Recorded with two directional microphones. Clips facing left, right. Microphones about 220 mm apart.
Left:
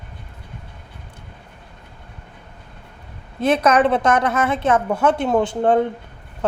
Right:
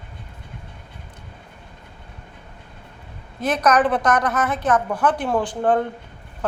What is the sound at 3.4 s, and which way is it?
A woman's voice, 25° left (ahead or behind).